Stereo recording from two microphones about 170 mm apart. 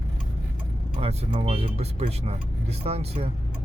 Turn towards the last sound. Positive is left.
turn(degrees=-35)  # may be behind; listen again after turning